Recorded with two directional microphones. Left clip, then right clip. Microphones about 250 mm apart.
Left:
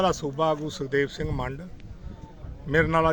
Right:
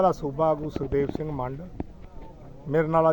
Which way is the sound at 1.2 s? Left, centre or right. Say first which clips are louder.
Even; centre.